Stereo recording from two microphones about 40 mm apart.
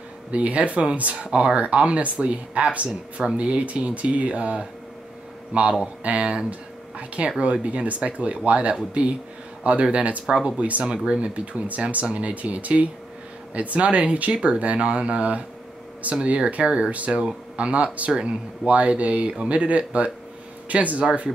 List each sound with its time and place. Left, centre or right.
0.3 s speech: right
7.4 s speech: right
14.3 s speech: right
14.6 s speech: right